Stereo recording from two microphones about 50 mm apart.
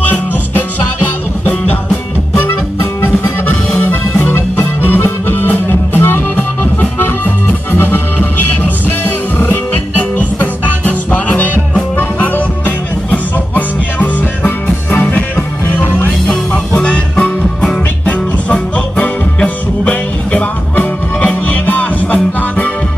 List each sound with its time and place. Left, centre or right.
0.0 s music: left
2.4 s music: left
6.3 s accordion: left
10.1 s music: left